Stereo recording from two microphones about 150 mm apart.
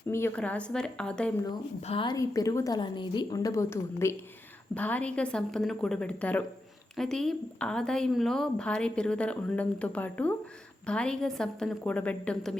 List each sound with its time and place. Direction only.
0.1 s a woman's voice: 15° left (ahead or behind)
1.8 s a woman's voice: 40° left (ahead or behind)
2.1 s a woman's voice: 20° left (ahead or behind); by 12.5 s 5° left (ahead or behind)